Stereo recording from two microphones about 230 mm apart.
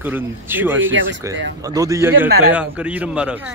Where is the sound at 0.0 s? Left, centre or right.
Centre.